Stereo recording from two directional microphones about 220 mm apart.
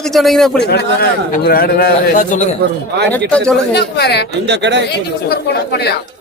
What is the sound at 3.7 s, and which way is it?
Speech, 50° left (ahead or behind).